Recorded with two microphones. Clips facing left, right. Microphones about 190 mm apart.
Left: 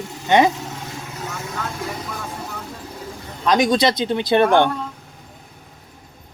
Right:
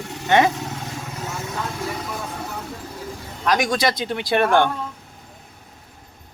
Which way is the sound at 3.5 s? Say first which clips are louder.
Left 4 dB; 20° left (ahead or behind).